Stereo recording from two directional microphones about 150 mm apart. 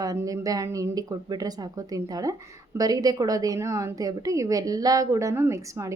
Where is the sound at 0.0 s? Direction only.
25° right (ahead or behind).